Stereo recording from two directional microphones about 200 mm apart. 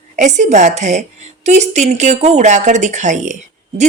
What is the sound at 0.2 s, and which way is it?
Speech, 35° right (ahead or behind).